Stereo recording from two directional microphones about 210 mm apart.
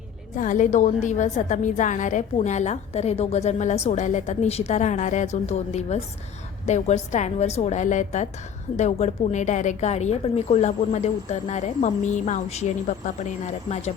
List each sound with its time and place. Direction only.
0.3 s a woman's voice: 40° left (ahead or behind)